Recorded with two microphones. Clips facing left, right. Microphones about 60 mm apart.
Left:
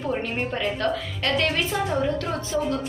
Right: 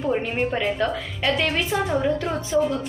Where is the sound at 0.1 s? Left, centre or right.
Centre.